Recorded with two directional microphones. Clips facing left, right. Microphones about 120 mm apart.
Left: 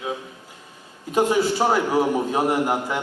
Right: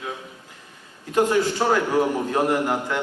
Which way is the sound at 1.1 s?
15° left (ahead or behind).